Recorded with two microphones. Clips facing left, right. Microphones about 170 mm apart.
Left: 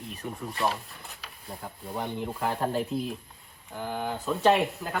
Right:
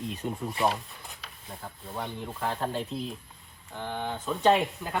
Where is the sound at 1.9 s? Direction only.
10° left (ahead or behind).